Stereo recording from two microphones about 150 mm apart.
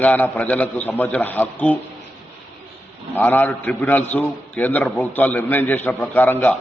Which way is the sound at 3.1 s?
10° left (ahead or behind).